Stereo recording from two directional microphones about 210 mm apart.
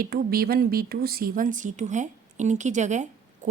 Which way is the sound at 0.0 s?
45° right (ahead or behind).